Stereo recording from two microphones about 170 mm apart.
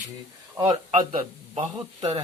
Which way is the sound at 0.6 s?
30° right (ahead or behind).